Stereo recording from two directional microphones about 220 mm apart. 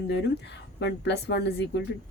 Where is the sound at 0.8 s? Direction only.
50° left (ahead or behind).